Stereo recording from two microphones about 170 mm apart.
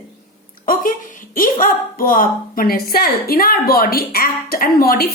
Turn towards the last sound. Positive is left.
turn(degrees=65)  # may be behind; listen again after turning